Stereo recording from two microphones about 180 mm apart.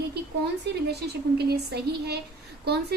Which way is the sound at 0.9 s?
65° right (ahead or behind).